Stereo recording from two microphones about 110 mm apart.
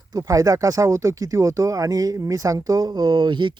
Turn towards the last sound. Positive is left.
turn(degrees=-45)  # may be behind; listen again after turning